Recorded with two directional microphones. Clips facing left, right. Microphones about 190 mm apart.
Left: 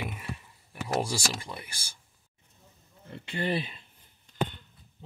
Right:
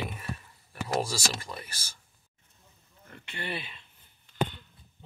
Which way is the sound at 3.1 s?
30° left (ahead or behind).